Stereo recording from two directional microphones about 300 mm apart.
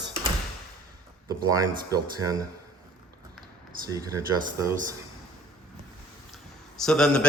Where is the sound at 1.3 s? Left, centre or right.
Centre.